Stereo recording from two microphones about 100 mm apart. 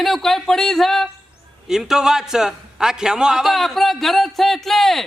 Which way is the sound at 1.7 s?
5° right (ahead or behind).